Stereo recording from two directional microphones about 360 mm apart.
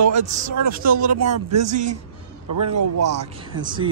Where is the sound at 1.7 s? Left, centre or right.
Centre.